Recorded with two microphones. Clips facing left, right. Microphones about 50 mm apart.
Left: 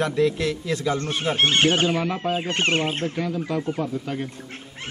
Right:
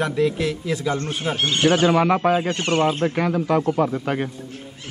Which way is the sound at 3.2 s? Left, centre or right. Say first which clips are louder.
Right 6 dB; right.